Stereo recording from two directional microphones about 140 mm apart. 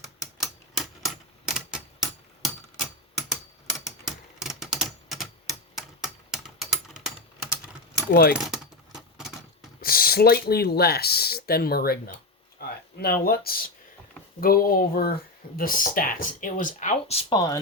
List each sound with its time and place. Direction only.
0.3 s typewriter: centre (ahead or behind)
8.4 s keys jangling: 5° right (ahead or behind)
9.8 s speech: 90° left; by 17.3 s 45° left (ahead or behind)
17.3 s speech: 25° left (ahead or behind)